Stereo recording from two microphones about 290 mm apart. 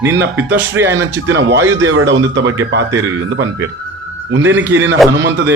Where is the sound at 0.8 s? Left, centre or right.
Right.